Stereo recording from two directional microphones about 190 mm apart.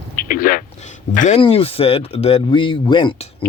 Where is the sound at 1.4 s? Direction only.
30° left (ahead or behind).